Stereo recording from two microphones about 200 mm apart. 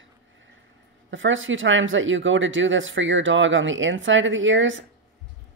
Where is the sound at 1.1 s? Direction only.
70° right (ahead or behind).